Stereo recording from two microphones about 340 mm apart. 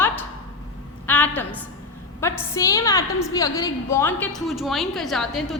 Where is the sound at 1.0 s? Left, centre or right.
Centre.